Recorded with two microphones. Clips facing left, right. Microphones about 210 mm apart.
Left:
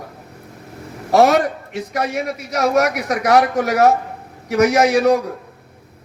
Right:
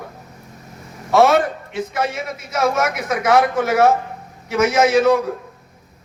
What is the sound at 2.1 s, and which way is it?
Speech, 65° left (ahead or behind).